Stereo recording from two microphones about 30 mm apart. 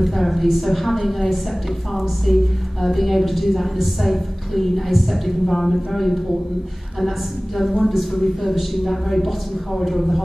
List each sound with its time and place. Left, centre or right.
0.0 s a woman's voice: centre